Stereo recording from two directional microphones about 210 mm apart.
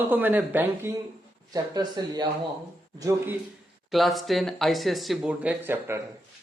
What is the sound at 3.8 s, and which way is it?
Speech, centre (ahead or behind).